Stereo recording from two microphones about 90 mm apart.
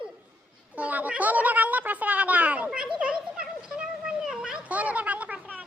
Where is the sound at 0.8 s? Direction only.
15° right (ahead or behind).